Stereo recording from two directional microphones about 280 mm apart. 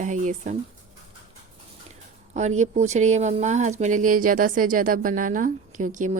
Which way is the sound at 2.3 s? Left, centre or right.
Right.